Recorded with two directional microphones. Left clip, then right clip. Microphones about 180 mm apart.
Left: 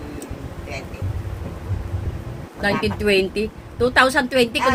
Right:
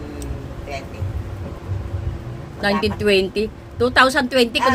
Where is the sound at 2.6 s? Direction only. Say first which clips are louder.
Right 1 dB; 5° right (ahead or behind).